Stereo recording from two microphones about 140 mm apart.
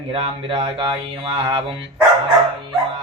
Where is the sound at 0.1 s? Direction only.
40° right (ahead or behind).